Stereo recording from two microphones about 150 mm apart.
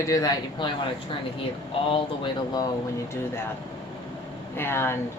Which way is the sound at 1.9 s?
30° left (ahead or behind).